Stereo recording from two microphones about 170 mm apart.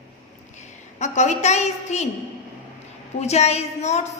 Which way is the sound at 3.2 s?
40° left (ahead or behind).